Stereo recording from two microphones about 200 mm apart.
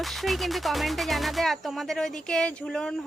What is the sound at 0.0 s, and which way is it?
Speech, centre (ahead or behind).